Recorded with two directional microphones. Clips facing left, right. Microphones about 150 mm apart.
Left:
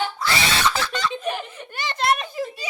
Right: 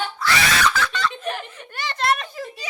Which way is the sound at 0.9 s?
15° left (ahead or behind).